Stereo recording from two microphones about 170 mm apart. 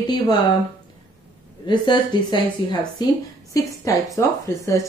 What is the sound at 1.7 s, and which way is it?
Speech, 25° left (ahead or behind).